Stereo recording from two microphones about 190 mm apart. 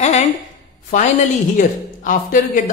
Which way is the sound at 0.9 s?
40° left (ahead or behind).